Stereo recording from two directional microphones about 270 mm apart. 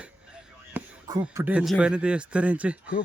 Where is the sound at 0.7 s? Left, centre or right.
Centre.